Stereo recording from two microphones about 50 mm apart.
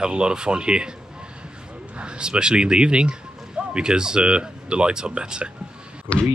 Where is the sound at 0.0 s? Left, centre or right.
Centre.